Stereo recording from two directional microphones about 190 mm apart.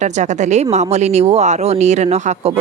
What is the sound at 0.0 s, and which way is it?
Speech, 40° right (ahead or behind).